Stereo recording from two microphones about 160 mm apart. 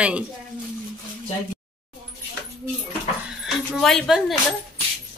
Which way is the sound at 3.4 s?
5° left (ahead or behind).